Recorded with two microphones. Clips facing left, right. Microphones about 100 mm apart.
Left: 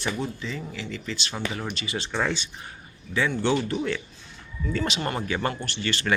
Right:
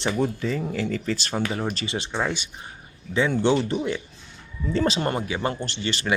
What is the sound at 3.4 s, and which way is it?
Speech, 25° right (ahead or behind).